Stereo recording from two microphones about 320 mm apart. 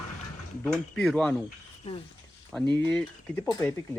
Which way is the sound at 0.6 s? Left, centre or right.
Centre.